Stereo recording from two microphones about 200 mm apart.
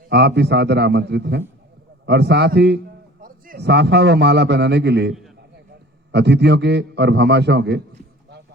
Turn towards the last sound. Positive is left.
turn(degrees=-55)  # may be behind; listen again after turning